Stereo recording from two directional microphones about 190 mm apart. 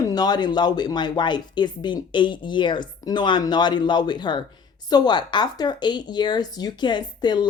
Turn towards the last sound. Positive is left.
turn(degrees=25)  # may be behind; listen again after turning